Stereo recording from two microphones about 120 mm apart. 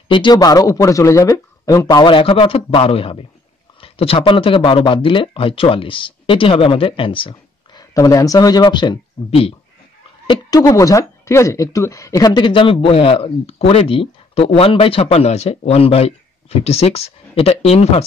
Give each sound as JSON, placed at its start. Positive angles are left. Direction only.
{"t": 0.1, "sound": "a woman's voice", "side_deg": 40}
{"t": 1.9, "sound": "speech", "side_deg": 40}
{"t": 7.9, "sound": "speech", "side_deg": 30}
{"t": 10.6, "sound": "a woman's voice", "side_deg": 30}
{"t": 12.4, "sound": "speech", "side_deg": 45}